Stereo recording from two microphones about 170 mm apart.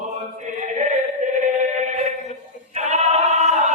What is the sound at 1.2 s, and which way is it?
Chant, 45° right (ahead or behind).